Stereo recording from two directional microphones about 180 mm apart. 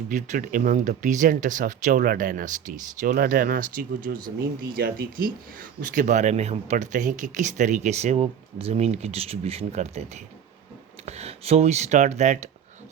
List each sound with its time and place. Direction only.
0.1 s speech: 45° right (ahead or behind)